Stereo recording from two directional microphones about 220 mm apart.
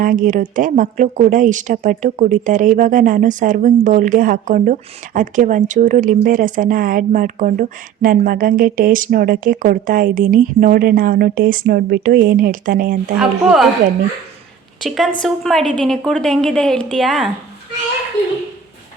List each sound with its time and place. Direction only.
0.0 s a woman's voice: 40° right (ahead or behind)
13.1 s a woman's voice: 5° right (ahead or behind)
14.8 s a woman's voice: centre (ahead or behind)